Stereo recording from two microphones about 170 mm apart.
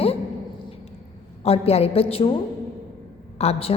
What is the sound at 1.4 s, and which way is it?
Speech, 35° left (ahead or behind).